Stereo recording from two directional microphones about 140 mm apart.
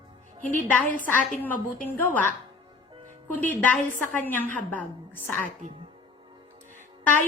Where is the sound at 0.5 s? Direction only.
70° left (ahead or behind).